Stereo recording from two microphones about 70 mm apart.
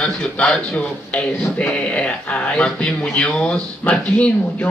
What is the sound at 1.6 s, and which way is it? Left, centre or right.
Speech, centre.